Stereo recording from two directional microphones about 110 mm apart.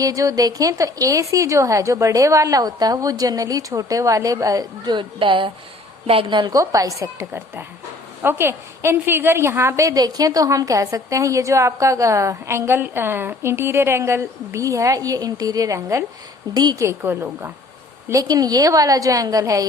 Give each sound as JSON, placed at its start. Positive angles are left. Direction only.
{"t": 0.0, "sound": "a woman's voice", "side_deg": -30}
{"t": 4.9, "sound": "a woman's voice", "side_deg": -50}
{"t": 6.6, "sound": "a woman's voice", "side_deg": -30}
{"t": 16.6, "sound": "a woman's voice", "side_deg": -40}
{"t": 16.8, "sound": "a woman's voice", "side_deg": -25}
{"t": 18.1, "sound": "a woman's voice", "side_deg": -35}